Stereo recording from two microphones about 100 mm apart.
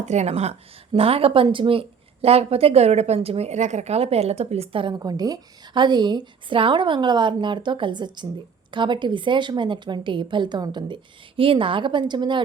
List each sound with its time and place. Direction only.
0.3 s speech: 90° right
0.9 s a woman's voice: 75° right (ahead or behind)
4.9 s a woman's voice: 40° right (ahead or behind)